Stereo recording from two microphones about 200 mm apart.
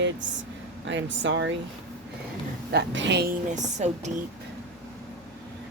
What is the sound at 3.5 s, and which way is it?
Speech, 35° right (ahead or behind).